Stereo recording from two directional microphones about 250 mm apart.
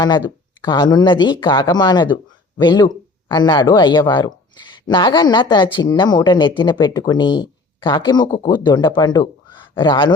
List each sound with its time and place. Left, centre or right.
0.6 s speech: centre